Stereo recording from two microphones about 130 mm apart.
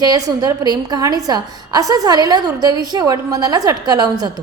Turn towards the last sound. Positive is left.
turn(degrees=-30)  # may be behind; listen again after turning